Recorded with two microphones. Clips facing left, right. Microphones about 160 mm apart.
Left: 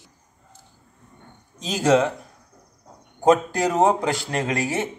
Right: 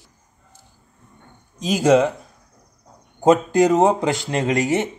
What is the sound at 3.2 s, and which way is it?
Speech, 20° right (ahead or behind).